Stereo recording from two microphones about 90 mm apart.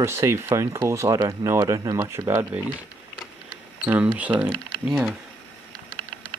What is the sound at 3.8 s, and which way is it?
Speech, 15° right (ahead or behind).